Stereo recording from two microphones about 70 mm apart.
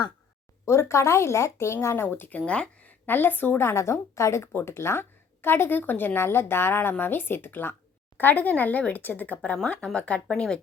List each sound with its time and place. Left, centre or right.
0.6 s speech: left
2.5 s speech: centre
3.1 s speech: left; by 10.6 s centre